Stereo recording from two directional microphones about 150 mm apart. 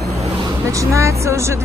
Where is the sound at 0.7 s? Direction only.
20° right (ahead or behind).